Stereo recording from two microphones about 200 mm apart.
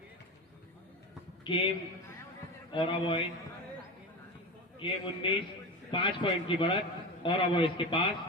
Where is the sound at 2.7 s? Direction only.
25° left (ahead or behind).